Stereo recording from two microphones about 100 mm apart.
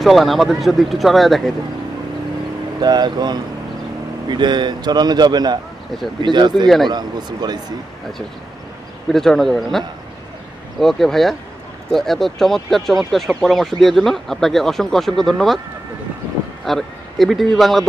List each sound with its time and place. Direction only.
0.0 s speech: centre (ahead or behind)
2.8 s a man's voice: 45° right (ahead or behind)
9.1 s speech: 5° left (ahead or behind)
16.6 s speech: centre (ahead or behind)